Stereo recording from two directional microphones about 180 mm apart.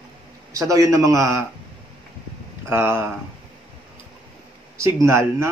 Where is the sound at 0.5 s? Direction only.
20° right (ahead or behind).